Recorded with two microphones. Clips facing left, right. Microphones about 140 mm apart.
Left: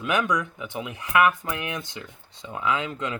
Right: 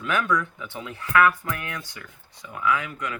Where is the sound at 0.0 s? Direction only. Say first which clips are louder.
Even; 15° left (ahead or behind).